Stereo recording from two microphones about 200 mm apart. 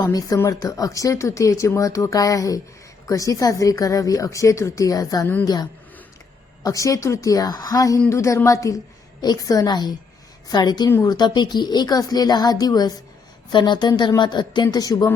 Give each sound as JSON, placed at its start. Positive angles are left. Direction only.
{"t": 0.0, "sound": "speech", "side_deg": 15}
{"t": 6.6, "sound": "a woman's voice", "side_deg": 15}